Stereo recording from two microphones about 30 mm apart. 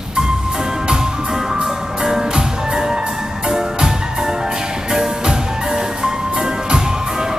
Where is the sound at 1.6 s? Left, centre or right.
Centre.